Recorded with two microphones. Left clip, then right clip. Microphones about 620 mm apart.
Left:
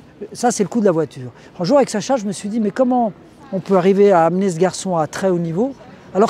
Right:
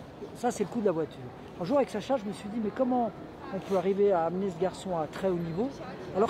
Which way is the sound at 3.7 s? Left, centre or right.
Left.